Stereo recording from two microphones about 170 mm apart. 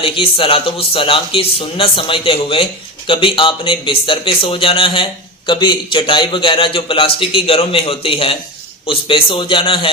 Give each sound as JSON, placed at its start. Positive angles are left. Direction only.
{"t": 0.0, "sound": "a man's voice", "side_deg": 35}